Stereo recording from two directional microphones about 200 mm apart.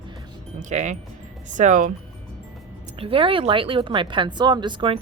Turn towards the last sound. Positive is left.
turn(degrees=-25)  # may be behind; listen again after turning